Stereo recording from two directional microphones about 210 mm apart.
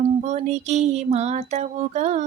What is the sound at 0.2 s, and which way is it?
Female singing, 35° right (ahead or behind).